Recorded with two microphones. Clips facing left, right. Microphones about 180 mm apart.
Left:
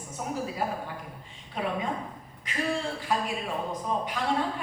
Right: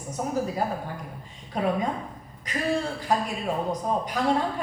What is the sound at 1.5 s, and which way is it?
A woman's voice, 40° right (ahead or behind).